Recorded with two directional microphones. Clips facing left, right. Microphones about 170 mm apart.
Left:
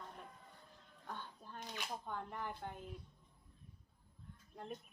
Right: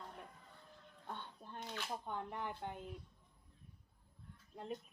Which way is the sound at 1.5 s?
15° left (ahead or behind).